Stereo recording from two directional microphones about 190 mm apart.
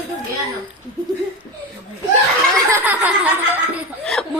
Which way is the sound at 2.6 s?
10° right (ahead or behind).